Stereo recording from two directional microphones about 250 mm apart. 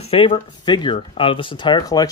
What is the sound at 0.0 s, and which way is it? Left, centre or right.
Speech, left.